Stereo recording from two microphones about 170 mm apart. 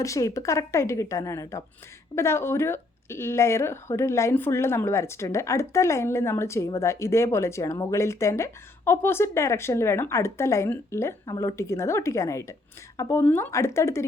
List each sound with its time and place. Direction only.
0.0 s speech: 20° left (ahead or behind)